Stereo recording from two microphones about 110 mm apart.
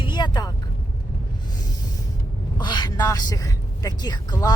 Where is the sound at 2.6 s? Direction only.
40° left (ahead or behind).